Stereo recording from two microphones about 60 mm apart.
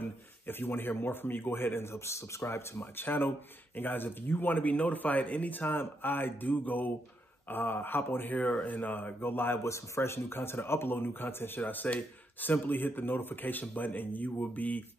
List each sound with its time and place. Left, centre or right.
0.0 s speech: left
2.8 s speech: left
8.4 s speech: left
9.7 s speech: left